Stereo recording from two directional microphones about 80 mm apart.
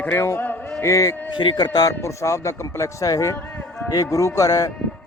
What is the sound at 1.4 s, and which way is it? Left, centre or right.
Speech, left.